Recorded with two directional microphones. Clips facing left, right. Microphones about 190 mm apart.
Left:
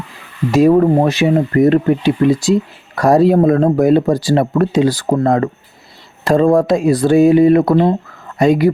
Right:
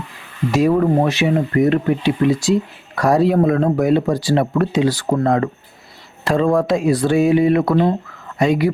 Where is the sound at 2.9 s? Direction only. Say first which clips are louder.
Left 4 dB; 40° left (ahead or behind).